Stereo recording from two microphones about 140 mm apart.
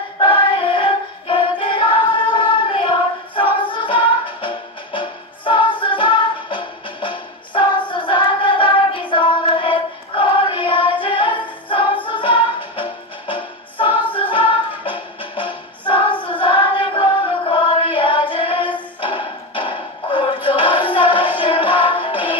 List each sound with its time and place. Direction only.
0.2 s music: 35° left (ahead or behind)
7.9 s hands: 35° left (ahead or behind)
9.1 s child singing: 35° left (ahead or behind)
18.9 s music: 35° left (ahead or behind)